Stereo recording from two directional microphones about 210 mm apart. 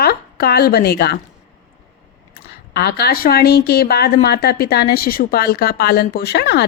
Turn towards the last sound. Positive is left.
turn(degrees=50)  # may be behind; listen again after turning